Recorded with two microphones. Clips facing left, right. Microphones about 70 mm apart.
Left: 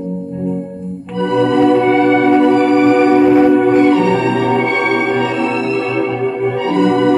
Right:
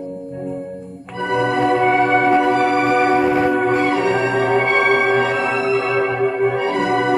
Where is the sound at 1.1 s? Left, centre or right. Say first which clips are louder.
Left 5 dB; centre.